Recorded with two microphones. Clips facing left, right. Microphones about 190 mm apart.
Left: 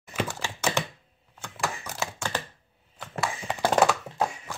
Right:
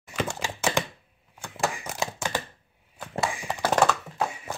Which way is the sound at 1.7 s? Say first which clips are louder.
Right 2 dB; 15° right (ahead or behind).